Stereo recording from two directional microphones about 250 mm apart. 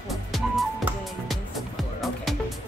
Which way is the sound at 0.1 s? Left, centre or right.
Centre.